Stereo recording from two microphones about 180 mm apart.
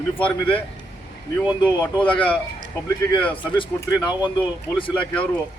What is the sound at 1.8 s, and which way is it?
Speech, 10° left (ahead or behind).